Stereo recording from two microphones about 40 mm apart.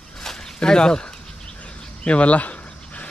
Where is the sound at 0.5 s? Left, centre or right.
Left.